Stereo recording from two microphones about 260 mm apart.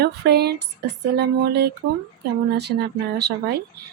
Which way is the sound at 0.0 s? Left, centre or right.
Right.